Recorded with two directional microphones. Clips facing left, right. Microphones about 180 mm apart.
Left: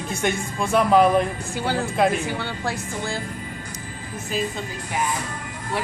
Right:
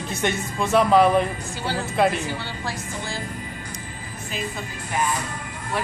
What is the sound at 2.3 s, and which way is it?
Speech, 55° left (ahead or behind).